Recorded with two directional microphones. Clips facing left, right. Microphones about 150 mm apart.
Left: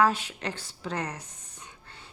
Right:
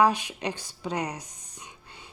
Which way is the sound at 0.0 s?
15° right (ahead or behind).